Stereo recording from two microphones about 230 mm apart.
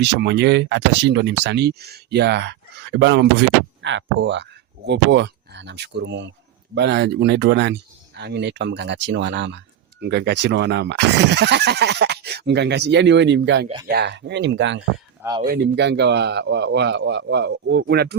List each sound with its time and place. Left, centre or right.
0.0 s speech: right
15.2 s speech: centre
15.4 s speech: right